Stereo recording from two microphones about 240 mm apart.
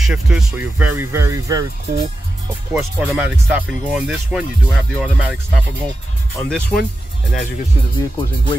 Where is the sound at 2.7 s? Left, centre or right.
Centre.